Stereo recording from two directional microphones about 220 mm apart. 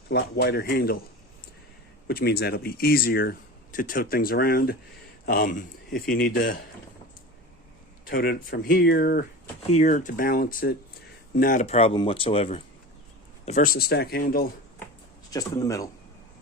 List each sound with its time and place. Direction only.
0.1 s speech: 50° left (ahead or behind)
2.0 s speech: 45° left (ahead or behind)
8.0 s speech: 40° left (ahead or behind)
11.6 s speech: 25° left (ahead or behind)
15.3 s speech: 15° left (ahead or behind)